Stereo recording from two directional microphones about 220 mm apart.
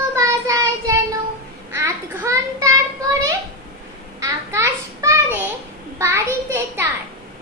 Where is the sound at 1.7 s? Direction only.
10° right (ahead or behind).